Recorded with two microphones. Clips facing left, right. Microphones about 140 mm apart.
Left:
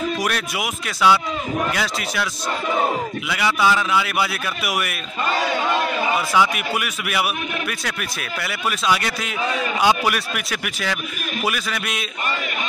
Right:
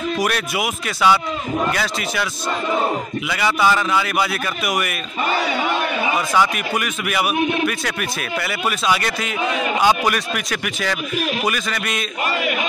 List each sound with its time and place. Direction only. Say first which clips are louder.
0.2 s a man's voice: right 3 dB; centre (ahead or behind)
3.3 s a man's voice: right 2 dB; centre (ahead or behind)
6.1 s a man's voice: right 1 dB; 5° left (ahead or behind)